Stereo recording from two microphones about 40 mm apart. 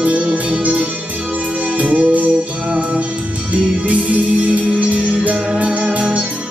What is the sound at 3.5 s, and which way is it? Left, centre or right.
Music, right.